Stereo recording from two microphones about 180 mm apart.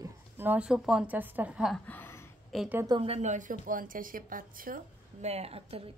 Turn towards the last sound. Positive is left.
turn(degrees=-30)  # may be behind; listen again after turning